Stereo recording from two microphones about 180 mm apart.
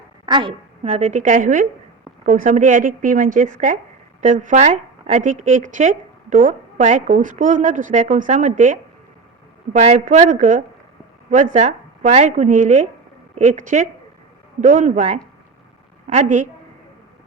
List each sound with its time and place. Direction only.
0.3 s a woman's voice: 25° right (ahead or behind)